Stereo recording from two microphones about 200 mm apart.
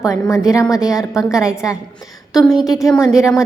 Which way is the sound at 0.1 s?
15° left (ahead or behind).